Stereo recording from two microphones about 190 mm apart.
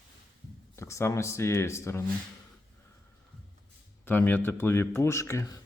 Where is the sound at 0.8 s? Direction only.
15° left (ahead or behind).